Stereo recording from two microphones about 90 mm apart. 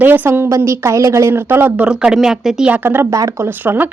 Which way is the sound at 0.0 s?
25° right (ahead or behind).